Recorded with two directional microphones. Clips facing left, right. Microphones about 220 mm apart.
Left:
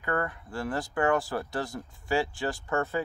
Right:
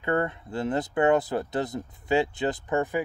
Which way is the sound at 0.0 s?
25° right (ahead or behind).